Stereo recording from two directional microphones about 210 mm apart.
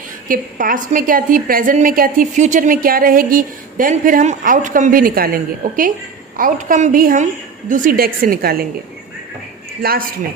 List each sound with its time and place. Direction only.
0.3 s a woman's voice: 40° right (ahead or behind)
9.8 s a woman's voice: 45° right (ahead or behind)